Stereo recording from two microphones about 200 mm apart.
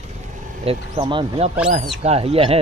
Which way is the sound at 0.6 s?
25° right (ahead or behind).